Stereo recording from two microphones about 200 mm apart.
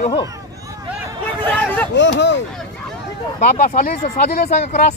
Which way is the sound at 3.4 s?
35° left (ahead or behind).